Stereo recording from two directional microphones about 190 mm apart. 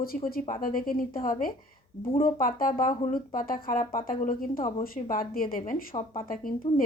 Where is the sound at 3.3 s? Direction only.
45° left (ahead or behind).